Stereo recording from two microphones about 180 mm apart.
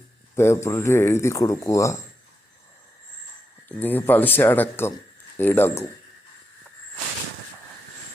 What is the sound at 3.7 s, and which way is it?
Speech, 10° left (ahead or behind).